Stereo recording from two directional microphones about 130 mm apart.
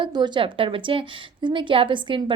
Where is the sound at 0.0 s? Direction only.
35° right (ahead or behind).